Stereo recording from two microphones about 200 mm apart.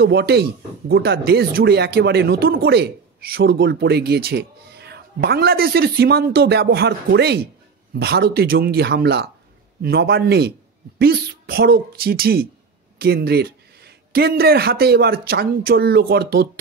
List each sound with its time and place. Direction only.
0.0 s speech: 55° right (ahead or behind)